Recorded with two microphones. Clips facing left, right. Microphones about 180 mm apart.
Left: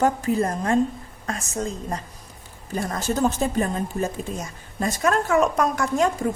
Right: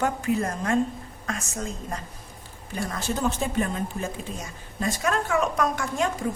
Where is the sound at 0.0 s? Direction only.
35° left (ahead or behind).